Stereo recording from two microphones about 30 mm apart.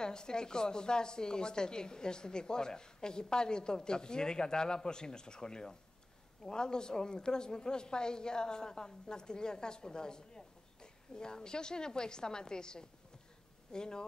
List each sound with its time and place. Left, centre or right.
0.0 s a woman's voice: left